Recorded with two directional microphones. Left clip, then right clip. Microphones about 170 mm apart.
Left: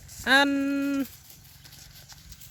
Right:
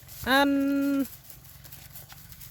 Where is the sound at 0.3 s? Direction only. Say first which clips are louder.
Left 2 dB; centre (ahead or behind).